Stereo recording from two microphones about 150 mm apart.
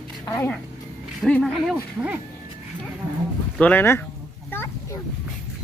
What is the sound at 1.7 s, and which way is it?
Speech, 10° right (ahead or behind).